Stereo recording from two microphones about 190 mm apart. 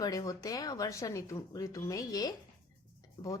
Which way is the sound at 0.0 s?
20° left (ahead or behind).